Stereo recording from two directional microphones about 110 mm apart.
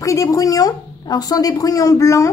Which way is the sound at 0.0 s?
30° left (ahead or behind).